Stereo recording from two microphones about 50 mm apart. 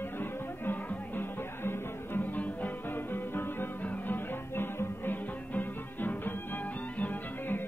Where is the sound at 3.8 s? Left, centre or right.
Left.